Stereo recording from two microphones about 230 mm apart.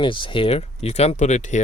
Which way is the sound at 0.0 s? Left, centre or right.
Left.